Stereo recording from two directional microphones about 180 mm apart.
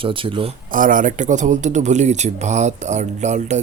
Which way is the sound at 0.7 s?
50° right (ahead or behind).